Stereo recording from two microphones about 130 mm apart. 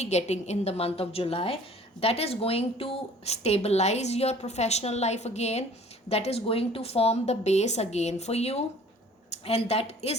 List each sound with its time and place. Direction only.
0.0 s a woman's voice: 60° left (ahead or behind)